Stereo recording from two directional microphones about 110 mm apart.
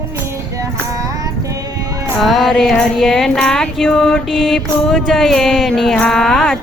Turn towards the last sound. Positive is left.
turn(degrees=5)  # may be behind; listen again after turning